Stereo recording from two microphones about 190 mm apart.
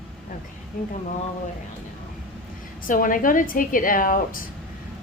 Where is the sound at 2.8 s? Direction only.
45° left (ahead or behind).